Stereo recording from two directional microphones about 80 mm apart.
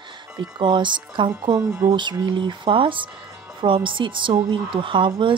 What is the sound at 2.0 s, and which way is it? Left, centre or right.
Speech, right.